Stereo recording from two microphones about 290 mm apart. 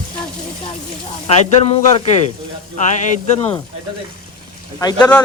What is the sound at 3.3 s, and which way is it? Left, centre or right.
Speech, centre.